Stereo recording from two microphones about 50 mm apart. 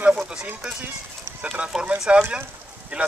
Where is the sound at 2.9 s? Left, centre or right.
Right.